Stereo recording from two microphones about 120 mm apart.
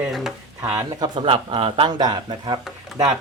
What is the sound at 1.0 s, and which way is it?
Speech, 45° right (ahead or behind).